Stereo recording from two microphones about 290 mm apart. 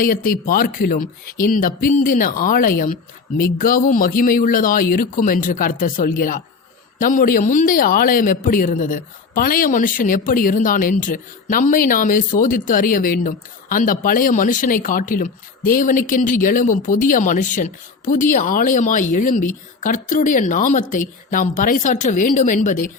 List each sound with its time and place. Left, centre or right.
0.0 s a man's voice: left